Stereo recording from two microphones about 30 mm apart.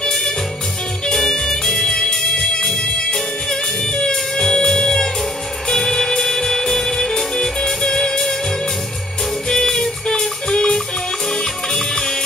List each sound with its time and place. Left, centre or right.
1.1 s music: centre
9.5 s music: centre